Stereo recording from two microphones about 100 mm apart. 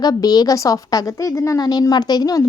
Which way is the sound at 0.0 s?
40° left (ahead or behind).